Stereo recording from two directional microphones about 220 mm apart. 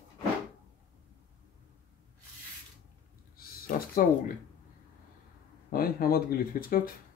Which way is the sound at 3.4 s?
40° left (ahead or behind).